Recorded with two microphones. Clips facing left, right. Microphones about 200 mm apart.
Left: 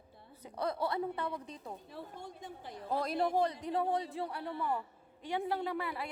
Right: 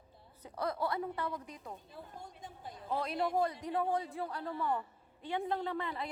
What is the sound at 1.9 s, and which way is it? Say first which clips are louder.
Speech: left 3 dB; 70° left (ahead or behind).